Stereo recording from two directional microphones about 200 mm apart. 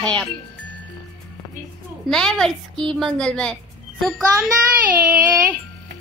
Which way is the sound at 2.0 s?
Centre (ahead or behind).